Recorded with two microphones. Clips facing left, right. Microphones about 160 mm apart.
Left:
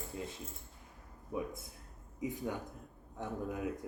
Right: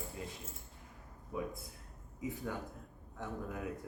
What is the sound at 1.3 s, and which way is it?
Speech, 25° left (ahead or behind).